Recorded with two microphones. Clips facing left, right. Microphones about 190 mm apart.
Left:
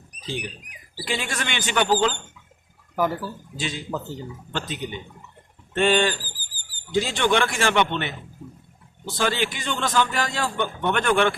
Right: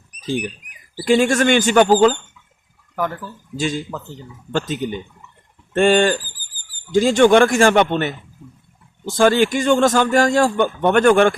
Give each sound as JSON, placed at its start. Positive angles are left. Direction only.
{"t": 0.2, "sound": "a man's voice", "side_deg": -50}
{"t": 2.9, "sound": "speech", "side_deg": 10}
{"t": 3.6, "sound": "a man's voice", "side_deg": -45}